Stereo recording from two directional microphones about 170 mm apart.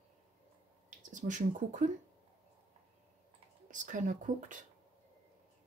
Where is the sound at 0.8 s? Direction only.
45° right (ahead or behind).